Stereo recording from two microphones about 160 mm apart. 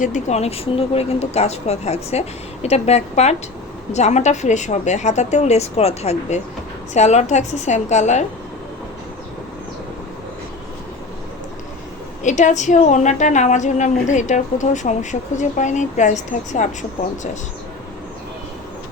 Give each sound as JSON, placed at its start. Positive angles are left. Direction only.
{"t": 0.0, "sound": "a woman's voice", "side_deg": 45}
{"t": 12.2, "sound": "a woman's voice", "side_deg": 50}